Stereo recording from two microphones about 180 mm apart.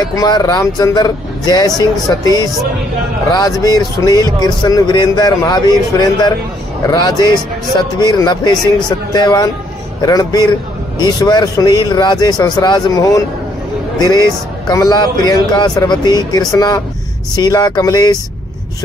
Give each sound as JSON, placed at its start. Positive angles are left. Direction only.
{"t": 0.0, "sound": "a man's voice", "side_deg": 20}